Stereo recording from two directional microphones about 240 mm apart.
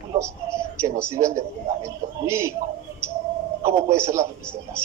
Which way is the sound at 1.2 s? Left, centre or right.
Centre.